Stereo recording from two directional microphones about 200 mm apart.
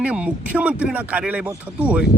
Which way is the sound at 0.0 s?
5° right (ahead or behind).